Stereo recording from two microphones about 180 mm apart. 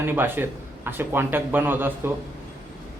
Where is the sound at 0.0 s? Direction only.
10° right (ahead or behind).